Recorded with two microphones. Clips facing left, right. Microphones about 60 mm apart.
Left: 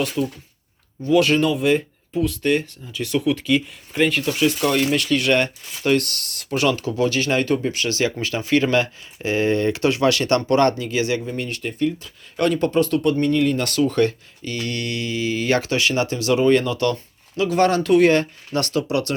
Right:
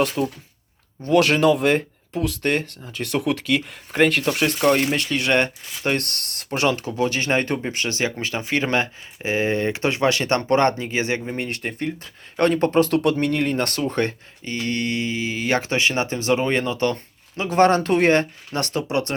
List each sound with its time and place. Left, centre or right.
0.2 s speech: right
1.0 s speech: right
4.7 s speech: right
12.8 s speech: right
13.3 s speech: right
18.9 s speech: right